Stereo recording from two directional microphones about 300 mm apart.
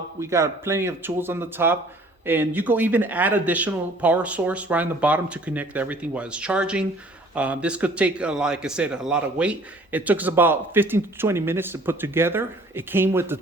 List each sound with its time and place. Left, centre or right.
0.2 s speech: centre